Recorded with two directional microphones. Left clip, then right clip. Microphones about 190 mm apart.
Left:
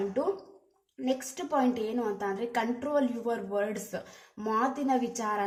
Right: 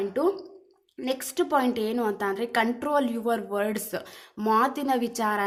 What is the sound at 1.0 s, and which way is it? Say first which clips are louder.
A woman's voice: right 5 dB; 30° right (ahead or behind).